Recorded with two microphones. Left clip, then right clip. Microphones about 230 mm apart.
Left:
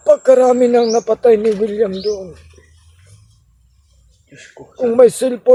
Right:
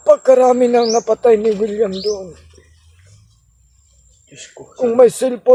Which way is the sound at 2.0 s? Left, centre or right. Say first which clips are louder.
Even; centre.